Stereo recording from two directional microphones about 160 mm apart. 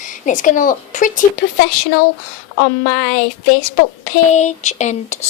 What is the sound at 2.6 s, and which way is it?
Speech, 55° left (ahead or behind).